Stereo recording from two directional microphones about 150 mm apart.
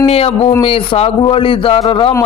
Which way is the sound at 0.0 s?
40° left (ahead or behind).